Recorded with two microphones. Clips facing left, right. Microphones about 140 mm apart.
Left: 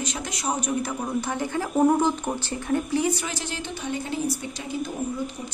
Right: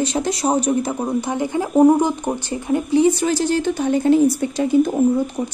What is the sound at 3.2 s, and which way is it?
A woman's voice, 40° right (ahead or behind).